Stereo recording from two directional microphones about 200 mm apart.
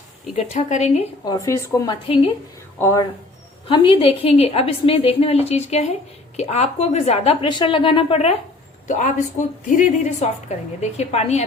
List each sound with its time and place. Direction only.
0.5 s a woman's voice: 35° left (ahead or behind)
1.2 s speech: 15° left (ahead or behind)
3.7 s a woman's voice: 25° left (ahead or behind)